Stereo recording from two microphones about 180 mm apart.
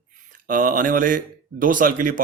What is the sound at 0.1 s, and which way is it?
Speech, 50° right (ahead or behind).